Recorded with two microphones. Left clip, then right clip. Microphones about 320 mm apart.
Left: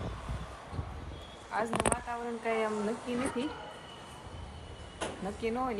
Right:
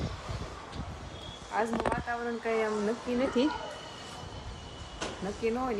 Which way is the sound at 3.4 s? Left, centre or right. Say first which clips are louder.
Right 8 dB; right.